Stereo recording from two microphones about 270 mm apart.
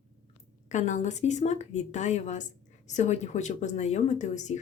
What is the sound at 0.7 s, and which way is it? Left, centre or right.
Speech, left.